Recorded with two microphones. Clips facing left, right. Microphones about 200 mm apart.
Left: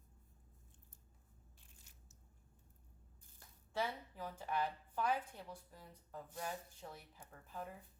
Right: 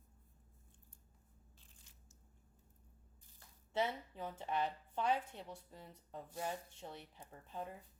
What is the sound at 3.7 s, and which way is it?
A woman's voice, 20° right (ahead or behind).